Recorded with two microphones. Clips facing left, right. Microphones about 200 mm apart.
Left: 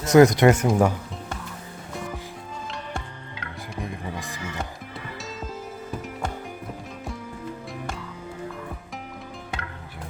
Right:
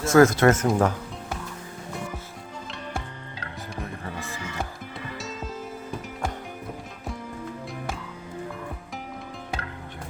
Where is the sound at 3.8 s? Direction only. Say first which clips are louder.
Left 3 dB; 15° left (ahead or behind).